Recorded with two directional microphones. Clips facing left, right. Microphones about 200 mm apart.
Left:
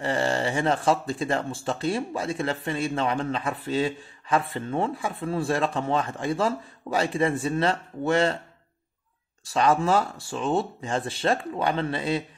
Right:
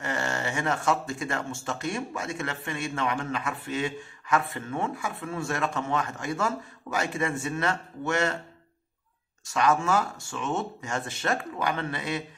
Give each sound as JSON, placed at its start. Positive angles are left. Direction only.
{"t": 0.0, "sound": "speech", "side_deg": 30}
{"t": 9.4, "sound": "speech", "side_deg": 30}